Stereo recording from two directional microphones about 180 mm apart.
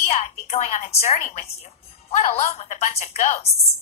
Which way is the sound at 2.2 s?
35° left (ahead or behind).